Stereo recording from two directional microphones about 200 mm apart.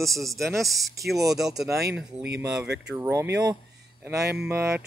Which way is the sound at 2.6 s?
55° right (ahead or behind).